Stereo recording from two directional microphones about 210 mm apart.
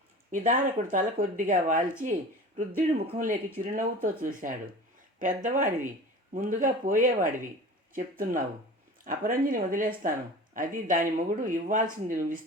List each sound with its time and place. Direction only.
0.3 s speech: 40° right (ahead or behind)